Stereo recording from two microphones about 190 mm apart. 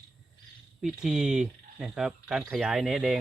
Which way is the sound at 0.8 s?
5° right (ahead or behind).